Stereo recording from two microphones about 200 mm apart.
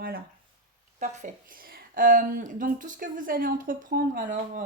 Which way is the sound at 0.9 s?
35° right (ahead or behind).